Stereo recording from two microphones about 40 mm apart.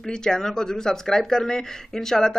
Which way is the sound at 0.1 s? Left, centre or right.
Centre.